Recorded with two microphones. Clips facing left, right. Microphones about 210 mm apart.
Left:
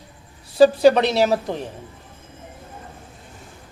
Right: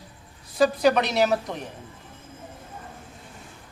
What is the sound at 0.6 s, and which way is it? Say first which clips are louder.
A man's voice: left 7 dB; 30° left (ahead or behind).